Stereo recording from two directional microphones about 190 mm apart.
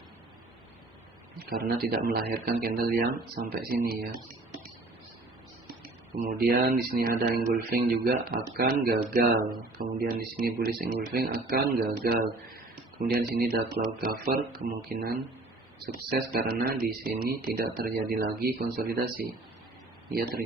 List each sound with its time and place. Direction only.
1.5 s speech: 55° right (ahead or behind)
6.1 s speech: 50° right (ahead or behind)